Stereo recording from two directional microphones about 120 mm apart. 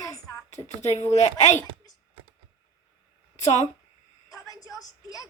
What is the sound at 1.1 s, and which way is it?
Speech, 75° left (ahead or behind).